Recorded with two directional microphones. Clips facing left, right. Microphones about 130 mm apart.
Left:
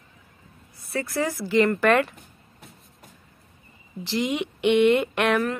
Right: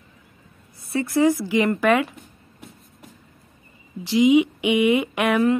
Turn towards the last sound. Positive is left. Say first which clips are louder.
# right 1 dB
turn(degrees=-5)  # may be behind; listen again after turning